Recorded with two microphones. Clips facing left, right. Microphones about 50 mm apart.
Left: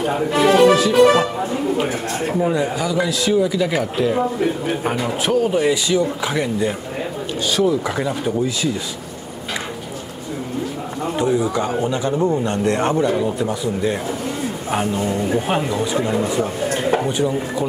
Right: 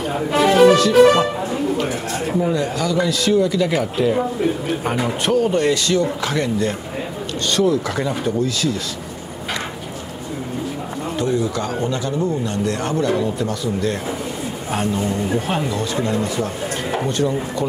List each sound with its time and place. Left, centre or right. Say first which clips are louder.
0.0 s speech: left 1 dB; centre
2.2 s speech: left 1 dB; centre
11.1 s speech: left 2 dB; centre
13.0 s speech: left 1 dB; centre